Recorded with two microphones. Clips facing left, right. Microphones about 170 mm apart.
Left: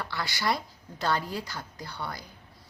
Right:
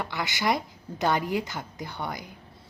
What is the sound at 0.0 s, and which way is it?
A woman's voice, 20° right (ahead or behind).